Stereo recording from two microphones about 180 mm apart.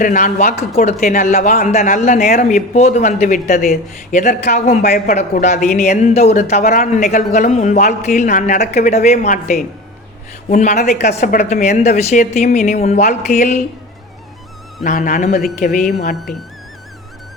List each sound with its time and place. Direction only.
0.0 s speech: 45° left (ahead or behind)
14.8 s speech: 50° left (ahead or behind)